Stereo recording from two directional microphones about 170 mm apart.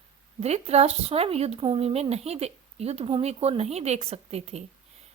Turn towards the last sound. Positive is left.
turn(degrees=-40)  # may be behind; listen again after turning